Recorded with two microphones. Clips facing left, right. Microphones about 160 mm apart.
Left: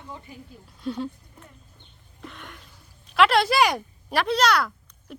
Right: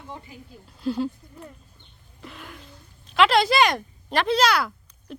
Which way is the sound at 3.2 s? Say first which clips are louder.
Right 1 dB; centre (ahead or behind).